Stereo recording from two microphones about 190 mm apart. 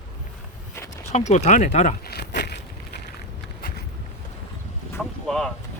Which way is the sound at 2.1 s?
60° left (ahead or behind).